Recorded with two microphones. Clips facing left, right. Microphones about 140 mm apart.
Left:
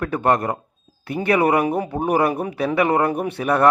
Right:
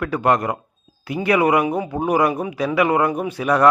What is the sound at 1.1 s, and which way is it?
Speech, 35° left (ahead or behind).